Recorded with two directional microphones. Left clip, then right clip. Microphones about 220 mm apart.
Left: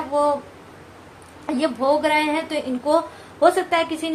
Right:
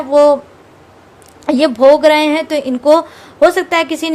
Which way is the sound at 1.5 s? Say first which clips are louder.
Right 12 dB; 50° right (ahead or behind).